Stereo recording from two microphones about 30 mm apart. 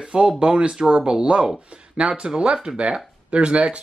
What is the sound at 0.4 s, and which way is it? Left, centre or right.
Speech, right.